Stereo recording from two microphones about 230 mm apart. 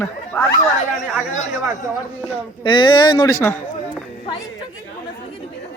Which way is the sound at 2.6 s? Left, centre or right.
Left.